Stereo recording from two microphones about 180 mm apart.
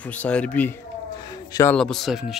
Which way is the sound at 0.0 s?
10° left (ahead or behind).